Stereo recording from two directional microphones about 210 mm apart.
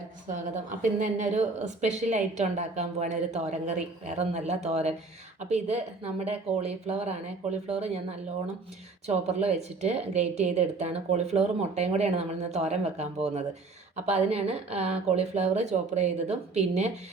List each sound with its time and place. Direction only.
0.3 s a woman's voice: 35° right (ahead or behind)
9.0 s a woman's voice: 30° right (ahead or behind)